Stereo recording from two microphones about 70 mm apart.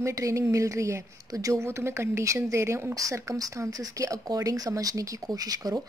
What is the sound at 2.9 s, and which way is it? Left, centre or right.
A woman's voice, right.